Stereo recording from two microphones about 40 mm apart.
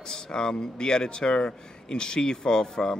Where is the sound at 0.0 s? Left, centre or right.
Centre.